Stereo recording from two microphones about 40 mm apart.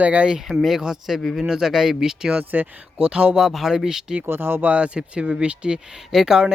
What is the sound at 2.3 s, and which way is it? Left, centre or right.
Speech, right.